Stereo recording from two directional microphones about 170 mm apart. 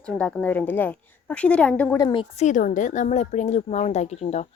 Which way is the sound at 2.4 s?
50° left (ahead or behind).